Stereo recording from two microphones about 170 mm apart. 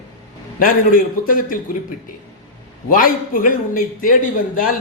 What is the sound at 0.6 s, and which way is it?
A man's voice, 55° left (ahead or behind).